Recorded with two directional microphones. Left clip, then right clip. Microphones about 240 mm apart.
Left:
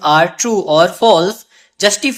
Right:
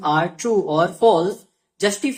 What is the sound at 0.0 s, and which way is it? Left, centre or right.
Speech, left.